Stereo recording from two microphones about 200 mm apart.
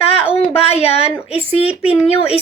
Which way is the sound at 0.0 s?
30° left (ahead or behind).